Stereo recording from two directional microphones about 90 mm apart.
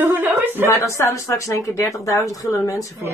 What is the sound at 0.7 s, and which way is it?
Speech, 35° left (ahead or behind).